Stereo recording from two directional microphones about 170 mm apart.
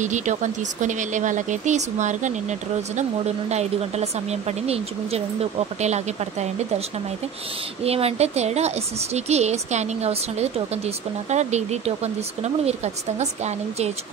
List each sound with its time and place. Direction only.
0.0 s speech: 45° right (ahead or behind)
7.8 s speech: 35° right (ahead or behind)